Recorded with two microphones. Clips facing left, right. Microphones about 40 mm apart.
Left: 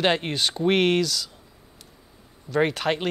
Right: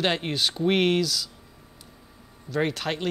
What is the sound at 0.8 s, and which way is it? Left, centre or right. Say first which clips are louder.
Speech: left 1 dB; centre.